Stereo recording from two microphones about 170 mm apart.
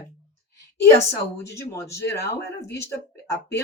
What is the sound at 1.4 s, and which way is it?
Speech, 15° left (ahead or behind).